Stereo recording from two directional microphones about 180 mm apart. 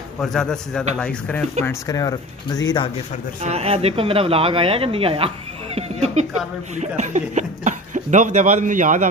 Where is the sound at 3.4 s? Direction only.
35° right (ahead or behind).